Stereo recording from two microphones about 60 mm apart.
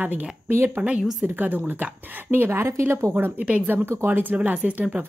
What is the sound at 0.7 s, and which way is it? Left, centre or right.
A woman's voice, right.